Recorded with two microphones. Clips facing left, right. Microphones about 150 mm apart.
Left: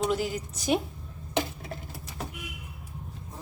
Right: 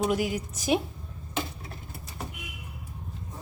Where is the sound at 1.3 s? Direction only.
85° left.